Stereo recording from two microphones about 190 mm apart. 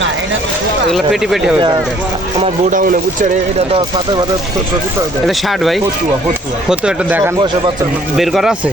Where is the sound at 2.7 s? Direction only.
45° right (ahead or behind).